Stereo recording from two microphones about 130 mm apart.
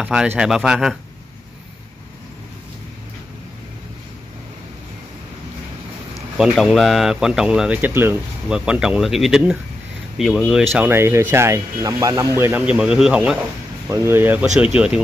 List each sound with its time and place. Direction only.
0.0 s speech: 10° right (ahead or behind)
6.3 s speech: 5° right (ahead or behind)
10.7 s speech: 15° right (ahead or behind)
12.4 s speech: 15° right (ahead or behind)
13.8 s speech: 20° right (ahead or behind)